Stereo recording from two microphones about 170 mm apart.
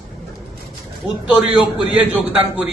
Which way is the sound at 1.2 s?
10° right (ahead or behind).